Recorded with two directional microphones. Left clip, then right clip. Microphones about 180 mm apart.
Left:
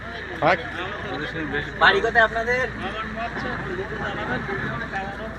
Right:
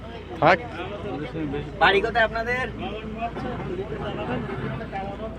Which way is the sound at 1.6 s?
55° right (ahead or behind).